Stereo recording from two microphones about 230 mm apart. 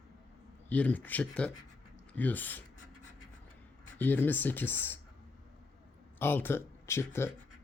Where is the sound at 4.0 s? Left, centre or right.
Centre.